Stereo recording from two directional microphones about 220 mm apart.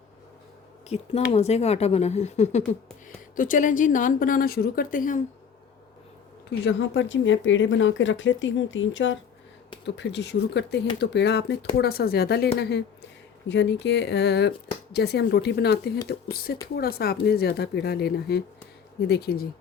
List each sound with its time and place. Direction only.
0.9 s a woman's voice: 30° left (ahead or behind)
6.7 s speech: 55° left (ahead or behind)
13.5 s speech: 55° left (ahead or behind)